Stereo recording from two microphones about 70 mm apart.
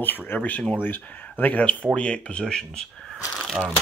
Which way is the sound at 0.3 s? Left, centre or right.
Left.